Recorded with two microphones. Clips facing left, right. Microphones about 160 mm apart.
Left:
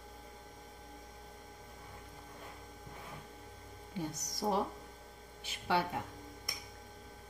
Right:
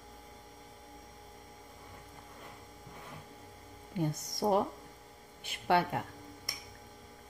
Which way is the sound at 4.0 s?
55° right (ahead or behind).